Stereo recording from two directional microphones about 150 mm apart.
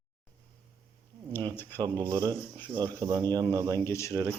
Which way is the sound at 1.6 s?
15° left (ahead or behind).